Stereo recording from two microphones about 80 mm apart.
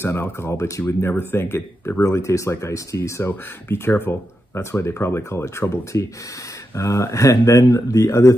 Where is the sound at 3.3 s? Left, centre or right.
Left.